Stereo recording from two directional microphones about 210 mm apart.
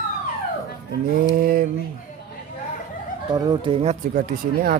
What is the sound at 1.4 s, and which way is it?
Speech, 45° right (ahead or behind).